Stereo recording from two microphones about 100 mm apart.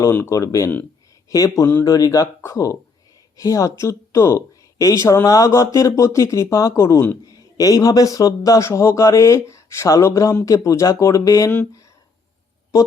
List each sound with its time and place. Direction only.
0.0 s speech: 25° left (ahead or behind)
1.8 s speech: 35° left (ahead or behind)
7.3 s speech: 35° left (ahead or behind)